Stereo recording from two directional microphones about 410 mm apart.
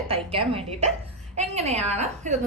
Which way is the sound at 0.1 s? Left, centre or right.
Centre.